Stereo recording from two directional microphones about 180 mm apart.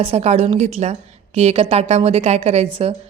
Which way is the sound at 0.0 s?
35° right (ahead or behind).